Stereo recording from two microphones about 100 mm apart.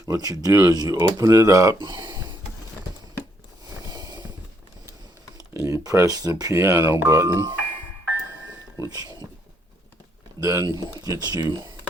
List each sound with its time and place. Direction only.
0.1 s speech: 40° right (ahead or behind)
1.8 s speech: 45° right (ahead or behind)
3.8 s a sound: 40° right (ahead or behind)
5.5 s speech: 35° right (ahead or behind)
8.8 s speech: 40° right (ahead or behind)
10.4 s speech: 30° right (ahead or behind)